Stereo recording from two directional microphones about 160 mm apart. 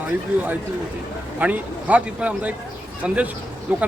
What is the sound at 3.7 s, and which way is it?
Speech, 10° right (ahead or behind).